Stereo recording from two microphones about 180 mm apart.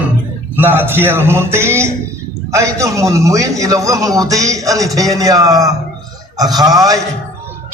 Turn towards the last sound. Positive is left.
turn(degrees=-20)  # may be behind; listen again after turning